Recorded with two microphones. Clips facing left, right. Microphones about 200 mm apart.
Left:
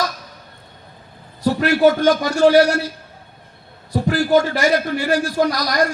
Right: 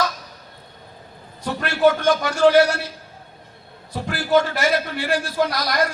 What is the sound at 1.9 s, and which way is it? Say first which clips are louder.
Speech: left 3 dB; 40° left (ahead or behind).